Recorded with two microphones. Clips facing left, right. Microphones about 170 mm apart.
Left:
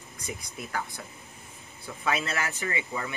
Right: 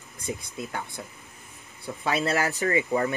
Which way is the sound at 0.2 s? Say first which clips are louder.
Right 5 dB; 25° right (ahead or behind).